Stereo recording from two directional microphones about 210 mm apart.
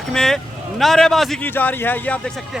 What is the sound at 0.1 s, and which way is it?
A man's voice, 5° left (ahead or behind).